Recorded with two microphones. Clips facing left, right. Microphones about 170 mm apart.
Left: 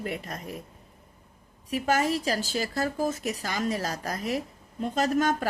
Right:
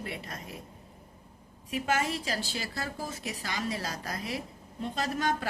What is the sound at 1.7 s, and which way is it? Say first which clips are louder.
A woman's voice: left 5 dB; 40° left (ahead or behind).